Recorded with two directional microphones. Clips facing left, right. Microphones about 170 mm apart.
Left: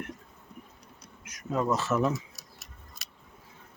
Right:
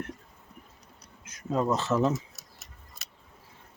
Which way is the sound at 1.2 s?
30° right (ahead or behind).